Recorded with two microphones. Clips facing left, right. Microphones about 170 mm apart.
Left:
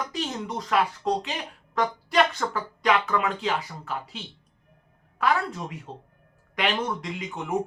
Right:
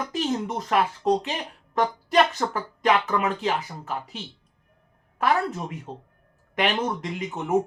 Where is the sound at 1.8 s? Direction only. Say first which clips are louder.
Right 2 dB; 40° right (ahead or behind).